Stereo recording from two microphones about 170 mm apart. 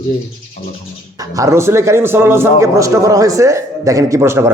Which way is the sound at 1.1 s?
20° right (ahead or behind).